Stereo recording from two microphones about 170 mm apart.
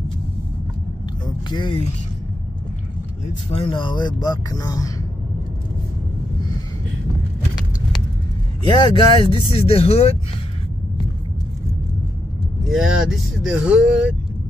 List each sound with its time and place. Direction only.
1.2 s speech: 25° left (ahead or behind)
3.4 s speech: 35° left (ahead or behind)
8.6 s speech: 25° left (ahead or behind)
12.6 s speech: 5° right (ahead or behind)